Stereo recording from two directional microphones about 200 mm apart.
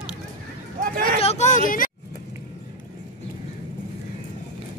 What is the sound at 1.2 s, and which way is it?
Vehicle, 35° left (ahead or behind).